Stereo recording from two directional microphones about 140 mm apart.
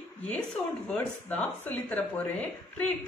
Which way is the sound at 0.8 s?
15° left (ahead or behind).